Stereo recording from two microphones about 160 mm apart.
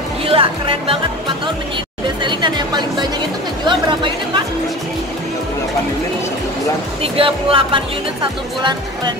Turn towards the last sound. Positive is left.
turn(degrees=-35)  # may be behind; listen again after turning